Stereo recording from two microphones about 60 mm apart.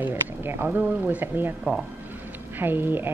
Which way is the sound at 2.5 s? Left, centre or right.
Right.